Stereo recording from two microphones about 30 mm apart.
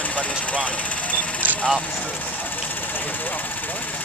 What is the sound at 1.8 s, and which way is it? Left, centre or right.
Speech, left.